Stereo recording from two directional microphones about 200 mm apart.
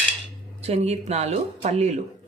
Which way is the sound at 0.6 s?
30° right (ahead or behind).